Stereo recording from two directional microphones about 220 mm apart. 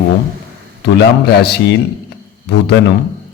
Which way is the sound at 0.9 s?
50° left (ahead or behind).